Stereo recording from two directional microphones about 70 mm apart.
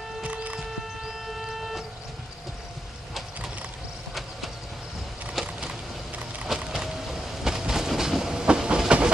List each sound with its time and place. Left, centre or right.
0.2 s music: centre
1.2 s printer: centre
5.3 s vehicle: centre